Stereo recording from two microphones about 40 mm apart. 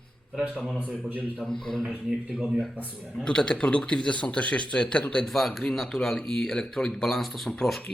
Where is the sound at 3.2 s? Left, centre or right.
Left.